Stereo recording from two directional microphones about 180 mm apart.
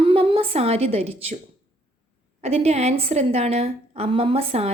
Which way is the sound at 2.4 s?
35° right (ahead or behind).